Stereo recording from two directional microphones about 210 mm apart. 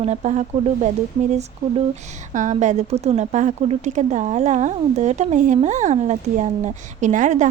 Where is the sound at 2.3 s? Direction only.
35° right (ahead or behind).